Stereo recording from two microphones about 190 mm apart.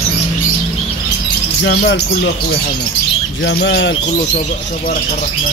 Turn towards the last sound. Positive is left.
turn(degrees=65)  # may be behind; listen again after turning